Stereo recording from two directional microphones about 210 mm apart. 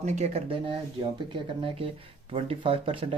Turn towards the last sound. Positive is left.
turn(degrees=-25)  # may be behind; listen again after turning